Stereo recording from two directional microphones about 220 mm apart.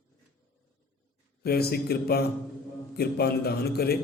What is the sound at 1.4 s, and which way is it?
Mantra, 45° left (ahead or behind).